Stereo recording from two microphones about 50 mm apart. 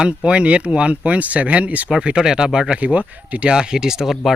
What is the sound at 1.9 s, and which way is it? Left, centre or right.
Speech, centre.